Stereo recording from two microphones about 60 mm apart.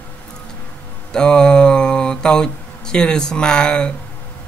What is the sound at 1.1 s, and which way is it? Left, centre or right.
Speech, centre.